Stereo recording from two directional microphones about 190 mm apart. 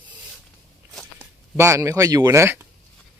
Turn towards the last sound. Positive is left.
turn(degrees=-15)  # may be behind; listen again after turning